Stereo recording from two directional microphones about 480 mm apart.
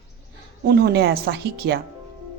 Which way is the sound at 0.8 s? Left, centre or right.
Centre.